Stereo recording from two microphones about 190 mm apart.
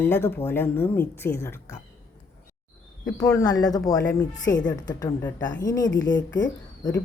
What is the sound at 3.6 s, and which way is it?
Speech, 20° left (ahead or behind).